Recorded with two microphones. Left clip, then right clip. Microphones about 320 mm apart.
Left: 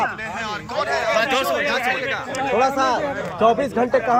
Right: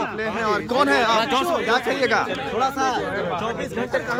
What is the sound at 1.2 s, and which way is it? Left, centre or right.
Speech, centre.